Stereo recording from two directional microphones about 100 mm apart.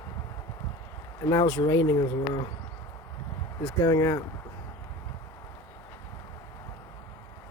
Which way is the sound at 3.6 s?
35° left (ahead or behind).